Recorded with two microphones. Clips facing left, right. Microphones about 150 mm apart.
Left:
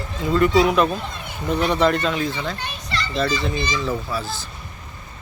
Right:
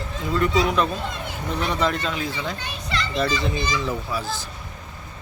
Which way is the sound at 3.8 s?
15° right (ahead or behind).